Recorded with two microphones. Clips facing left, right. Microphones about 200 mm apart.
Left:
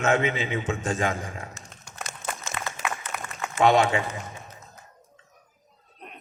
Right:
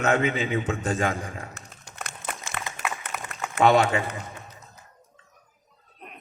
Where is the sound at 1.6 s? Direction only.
60° right (ahead or behind).